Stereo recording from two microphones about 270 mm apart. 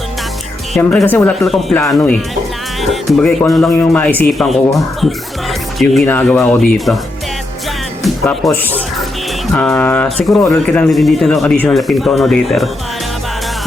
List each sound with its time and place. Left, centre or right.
0.7 s speech: centre
8.0 s speech: centre